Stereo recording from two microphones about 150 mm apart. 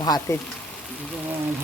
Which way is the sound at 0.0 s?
25° left (ahead or behind).